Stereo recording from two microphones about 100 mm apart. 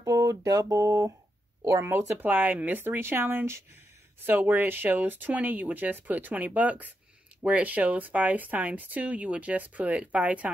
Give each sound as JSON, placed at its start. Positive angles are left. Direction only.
{"t": 0.0, "sound": "speech", "side_deg": -35}